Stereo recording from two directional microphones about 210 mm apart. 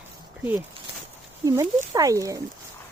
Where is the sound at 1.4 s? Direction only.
15° right (ahead or behind).